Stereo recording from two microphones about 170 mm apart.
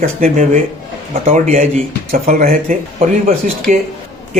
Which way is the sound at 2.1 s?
60° right (ahead or behind).